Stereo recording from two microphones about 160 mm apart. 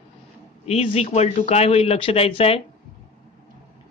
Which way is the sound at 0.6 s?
40° left (ahead or behind).